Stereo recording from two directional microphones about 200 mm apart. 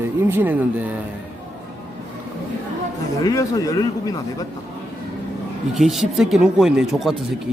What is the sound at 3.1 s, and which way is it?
Speech, 15° left (ahead or behind).